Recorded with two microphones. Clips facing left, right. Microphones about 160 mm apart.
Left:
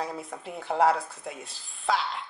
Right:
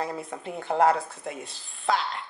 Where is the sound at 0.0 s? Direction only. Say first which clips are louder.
Right 2 dB; centre (ahead or behind).